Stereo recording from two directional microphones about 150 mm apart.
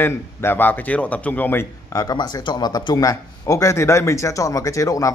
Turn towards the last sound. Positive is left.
turn(degrees=20)  # may be behind; listen again after turning